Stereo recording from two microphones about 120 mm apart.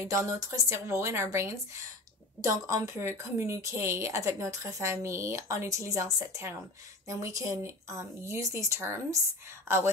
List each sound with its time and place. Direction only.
0.0 s a woman's voice: 25° right (ahead or behind)